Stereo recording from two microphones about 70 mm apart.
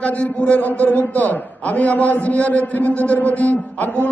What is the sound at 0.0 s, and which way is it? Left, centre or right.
A man's voice, centre.